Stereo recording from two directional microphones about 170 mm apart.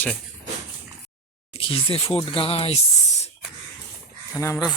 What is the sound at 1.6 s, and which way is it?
Speech, 35° left (ahead or behind).